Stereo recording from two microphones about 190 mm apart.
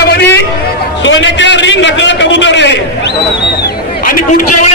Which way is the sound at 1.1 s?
75° left (ahead or behind).